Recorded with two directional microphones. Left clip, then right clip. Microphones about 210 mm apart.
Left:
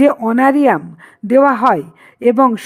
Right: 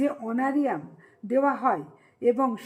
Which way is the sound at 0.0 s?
40° left (ahead or behind).